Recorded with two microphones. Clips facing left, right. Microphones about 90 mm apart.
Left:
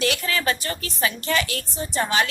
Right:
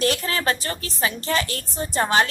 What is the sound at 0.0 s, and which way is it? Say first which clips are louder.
A woman's voice: right 1 dB; 35° right (ahead or behind).